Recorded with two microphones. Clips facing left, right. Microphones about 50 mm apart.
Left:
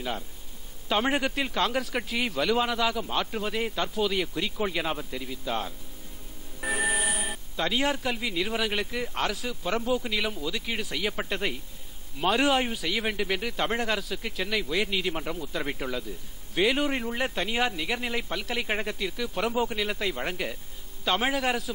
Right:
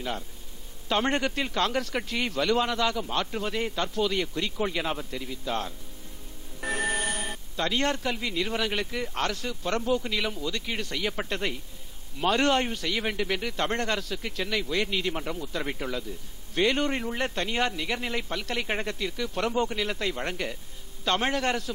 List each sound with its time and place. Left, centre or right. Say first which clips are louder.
0.8 s a man's voice: even; centre